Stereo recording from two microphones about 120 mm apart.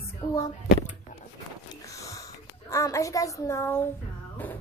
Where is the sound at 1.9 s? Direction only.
25° left (ahead or behind).